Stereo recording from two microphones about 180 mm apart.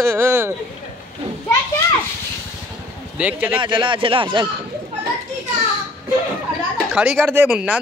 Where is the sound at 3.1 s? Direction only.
10° right (ahead or behind).